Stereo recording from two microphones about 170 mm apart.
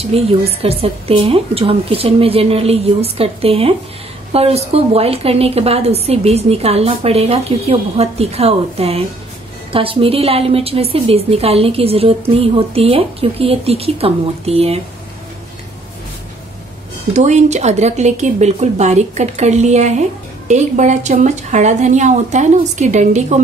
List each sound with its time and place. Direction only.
0.1 s a woman's voice: 35° right (ahead or behind)
17.1 s speech: 45° right (ahead or behind)